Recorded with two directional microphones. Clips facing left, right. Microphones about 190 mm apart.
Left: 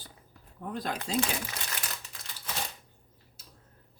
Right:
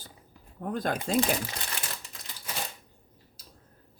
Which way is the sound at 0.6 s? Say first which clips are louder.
Right 4 dB; 50° right (ahead or behind).